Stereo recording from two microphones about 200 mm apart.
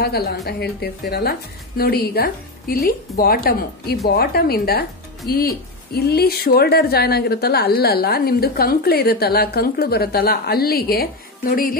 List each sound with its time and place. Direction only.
0.0 s speech: 50° left (ahead or behind)